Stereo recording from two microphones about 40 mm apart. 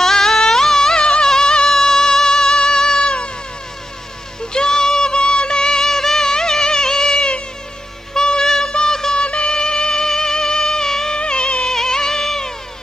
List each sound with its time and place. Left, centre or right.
0.0 s music: centre
4.4 s music: centre
9.1 s music: left
11.2 s music: left